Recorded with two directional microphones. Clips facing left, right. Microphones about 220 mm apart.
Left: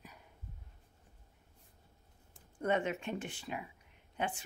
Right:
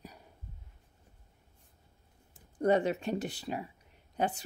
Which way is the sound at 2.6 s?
35° right (ahead or behind).